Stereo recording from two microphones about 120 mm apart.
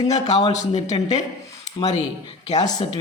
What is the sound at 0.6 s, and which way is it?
Speech, 65° left (ahead or behind).